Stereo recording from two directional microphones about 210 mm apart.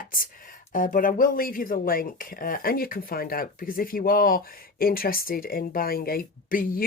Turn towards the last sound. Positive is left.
turn(degrees=40)  # may be behind; listen again after turning